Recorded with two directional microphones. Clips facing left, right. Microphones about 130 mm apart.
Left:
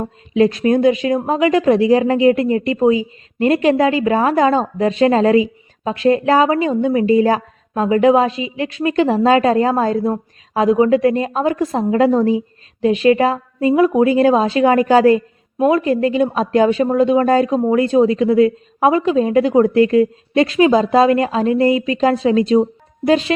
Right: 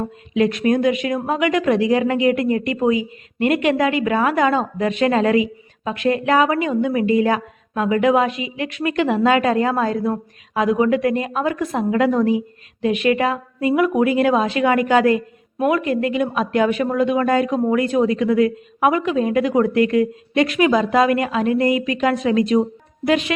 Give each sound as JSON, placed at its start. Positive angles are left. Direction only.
{"t": 0.3, "sound": "a woman's voice", "side_deg": 30}